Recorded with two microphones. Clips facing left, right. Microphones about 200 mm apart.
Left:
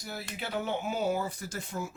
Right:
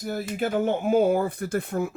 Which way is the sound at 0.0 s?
50° right (ahead or behind).